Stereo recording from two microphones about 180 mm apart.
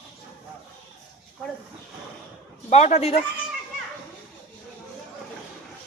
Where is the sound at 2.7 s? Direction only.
35° left (ahead or behind).